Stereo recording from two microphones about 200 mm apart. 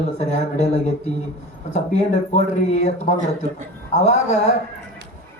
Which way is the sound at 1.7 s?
35° left (ahead or behind).